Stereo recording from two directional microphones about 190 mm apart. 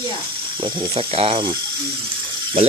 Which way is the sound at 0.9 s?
30° right (ahead or behind).